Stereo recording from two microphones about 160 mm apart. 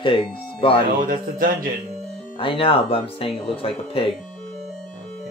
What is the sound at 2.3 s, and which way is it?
Speech, 35° left (ahead or behind).